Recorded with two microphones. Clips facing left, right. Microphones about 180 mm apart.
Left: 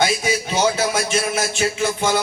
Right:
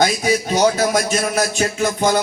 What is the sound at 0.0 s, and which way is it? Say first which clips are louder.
A man's voice: right 3 dB; 40° right (ahead or behind).